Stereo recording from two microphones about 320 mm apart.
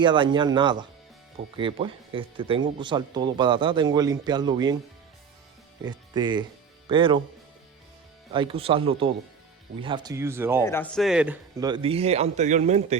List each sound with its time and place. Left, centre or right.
0.0 s speech: centre
5.8 s speech: centre
8.3 s speech: centre
10.6 s speech: centre; by 13.0 s right